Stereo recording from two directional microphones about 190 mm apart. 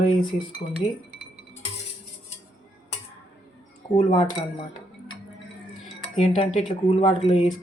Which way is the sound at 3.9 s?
25° left (ahead or behind).